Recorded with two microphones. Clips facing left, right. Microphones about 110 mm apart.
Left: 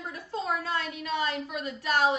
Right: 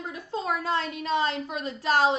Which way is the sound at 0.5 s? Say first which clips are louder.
Right 5 dB; 30° right (ahead or behind).